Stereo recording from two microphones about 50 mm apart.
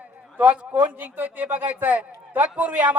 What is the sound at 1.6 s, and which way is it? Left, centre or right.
Speech, right.